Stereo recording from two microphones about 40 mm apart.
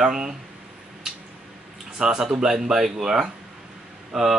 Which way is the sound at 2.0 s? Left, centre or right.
Centre.